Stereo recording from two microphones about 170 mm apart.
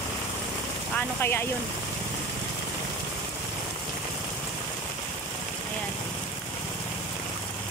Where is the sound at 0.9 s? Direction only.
15° left (ahead or behind).